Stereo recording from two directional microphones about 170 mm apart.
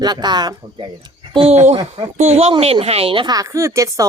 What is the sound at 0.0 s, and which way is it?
Speech, 25° right (ahead or behind).